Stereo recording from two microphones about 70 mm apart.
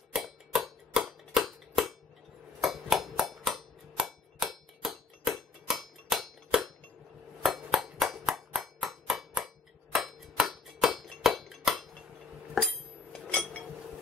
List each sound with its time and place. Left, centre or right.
0.1 s tick: centre
2.6 s a sound: centre
3.9 s clock: centre
7.4 s hammer: centre
9.9 s a sound: centre
12.6 s cutlery: centre